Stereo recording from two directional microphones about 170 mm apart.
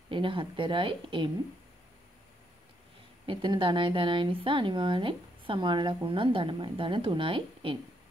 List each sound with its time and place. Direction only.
0.1 s speech: 30° right (ahead or behind)
3.3 s speech: 30° right (ahead or behind)